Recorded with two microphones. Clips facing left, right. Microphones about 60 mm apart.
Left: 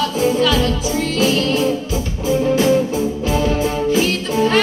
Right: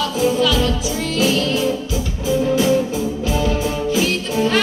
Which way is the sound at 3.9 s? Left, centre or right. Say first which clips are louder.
Left 2 dB; left.